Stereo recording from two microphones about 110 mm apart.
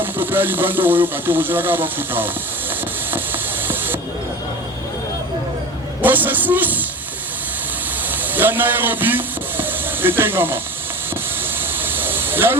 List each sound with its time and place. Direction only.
0.0 s speech: 20° right (ahead or behind)
6.0 s speech: 15° right (ahead or behind)
8.1 s speech: 15° right (ahead or behind)
11.8 s hiss: 20° right (ahead or behind)